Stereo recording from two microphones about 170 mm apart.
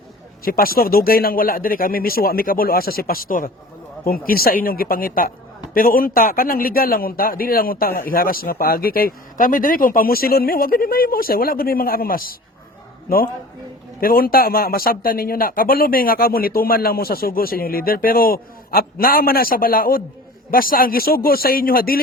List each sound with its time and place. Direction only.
0.4 s a man's voice: 60° left (ahead or behind)
14.0 s a man's voice: 60° left (ahead or behind)